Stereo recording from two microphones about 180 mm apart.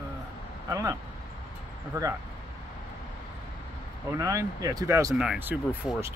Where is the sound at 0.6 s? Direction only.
20° right (ahead or behind).